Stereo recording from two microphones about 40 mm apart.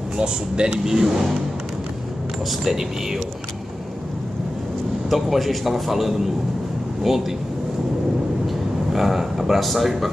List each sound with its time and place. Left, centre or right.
0.2 s speech: right
0.8 s speech: centre
2.6 s speech: centre
5.1 s a man's voice: centre
8.9 s speech: centre